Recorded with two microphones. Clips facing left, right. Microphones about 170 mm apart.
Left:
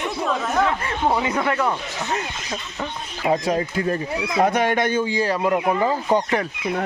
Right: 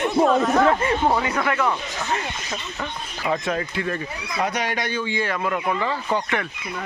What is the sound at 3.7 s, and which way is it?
Speech, 35° left (ahead or behind).